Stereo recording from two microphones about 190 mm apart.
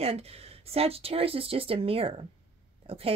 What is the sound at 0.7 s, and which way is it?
Speech, 30° right (ahead or behind).